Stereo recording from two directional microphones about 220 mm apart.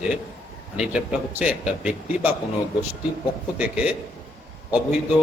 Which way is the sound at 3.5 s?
5° right (ahead or behind).